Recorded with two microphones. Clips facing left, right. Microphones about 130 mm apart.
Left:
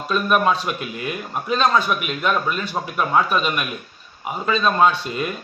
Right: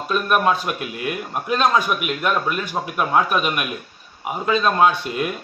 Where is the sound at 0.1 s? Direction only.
5° right (ahead or behind).